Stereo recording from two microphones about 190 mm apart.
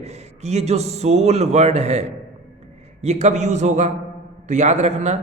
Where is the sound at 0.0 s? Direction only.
35° right (ahead or behind).